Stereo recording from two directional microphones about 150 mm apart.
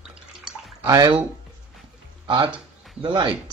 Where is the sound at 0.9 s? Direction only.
25° right (ahead or behind).